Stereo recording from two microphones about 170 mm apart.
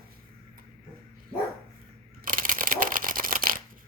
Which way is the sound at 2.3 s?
55° right (ahead or behind).